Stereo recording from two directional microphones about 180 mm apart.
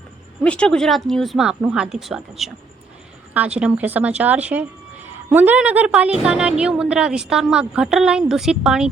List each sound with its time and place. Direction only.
0.4 s speech: 5° left (ahead or behind)
3.6 s speech: 10° right (ahead or behind)